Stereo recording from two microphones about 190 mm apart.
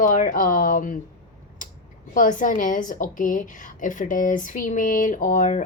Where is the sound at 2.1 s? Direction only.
45° left (ahead or behind).